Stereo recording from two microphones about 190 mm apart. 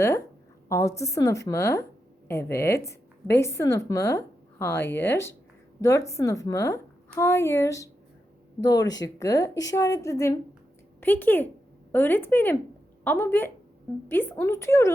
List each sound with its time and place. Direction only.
0.7 s a woman's voice: 15° left (ahead or behind)